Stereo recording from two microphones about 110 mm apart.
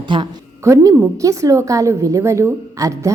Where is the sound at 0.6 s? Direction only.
25° right (ahead or behind).